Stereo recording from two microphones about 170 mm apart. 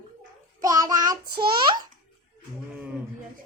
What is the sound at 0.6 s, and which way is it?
Child singing, 20° right (ahead or behind).